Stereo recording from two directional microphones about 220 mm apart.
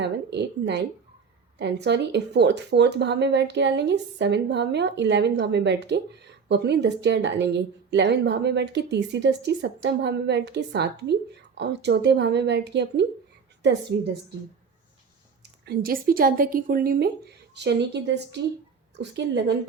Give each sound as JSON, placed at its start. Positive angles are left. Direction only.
{"t": 0.0, "sound": "a woman's voice", "side_deg": -50}
{"t": 15.6, "sound": "a woman's voice", "side_deg": -45}